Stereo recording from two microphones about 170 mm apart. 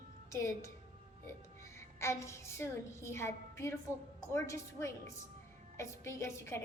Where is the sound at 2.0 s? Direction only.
15° left (ahead or behind).